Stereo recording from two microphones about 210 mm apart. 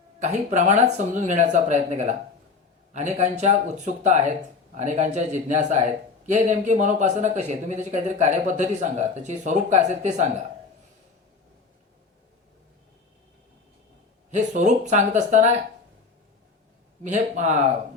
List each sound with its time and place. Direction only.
0.2 s speech: 35° right (ahead or behind)
14.3 s speech: 35° right (ahead or behind)
17.0 s speech: 35° right (ahead or behind)